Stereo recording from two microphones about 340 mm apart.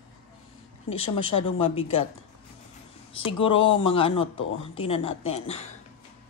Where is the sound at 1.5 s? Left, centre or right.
Centre.